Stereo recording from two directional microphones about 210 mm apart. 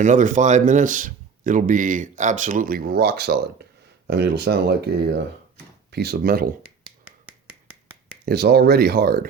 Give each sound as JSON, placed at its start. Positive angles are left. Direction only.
{"t": 0.0, "sound": "speech", "side_deg": -35}
{"t": 7.0, "sound": "finger snapping", "side_deg": -10}
{"t": 8.2, "sound": "speech", "side_deg": -50}